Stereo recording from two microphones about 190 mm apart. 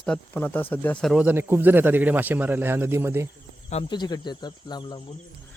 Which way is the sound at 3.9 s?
20° left (ahead or behind).